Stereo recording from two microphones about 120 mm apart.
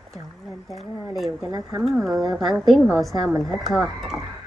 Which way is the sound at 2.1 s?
30° right (ahead or behind).